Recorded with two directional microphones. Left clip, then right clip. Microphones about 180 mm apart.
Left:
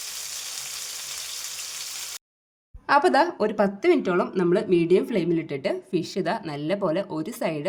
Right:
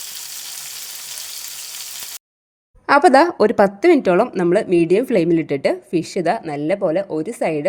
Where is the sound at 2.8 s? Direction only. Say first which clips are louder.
Right 7 dB; 30° right (ahead or behind).